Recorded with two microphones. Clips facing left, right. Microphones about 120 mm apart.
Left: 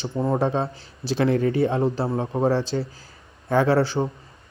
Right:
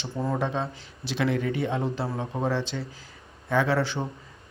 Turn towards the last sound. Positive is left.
turn(degrees=35)  # may be behind; listen again after turning